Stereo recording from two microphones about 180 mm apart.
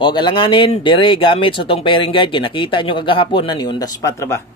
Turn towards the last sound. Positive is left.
turn(degrees=15)  # may be behind; listen again after turning